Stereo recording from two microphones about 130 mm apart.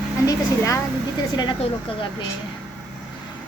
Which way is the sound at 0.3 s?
25° left (ahead or behind).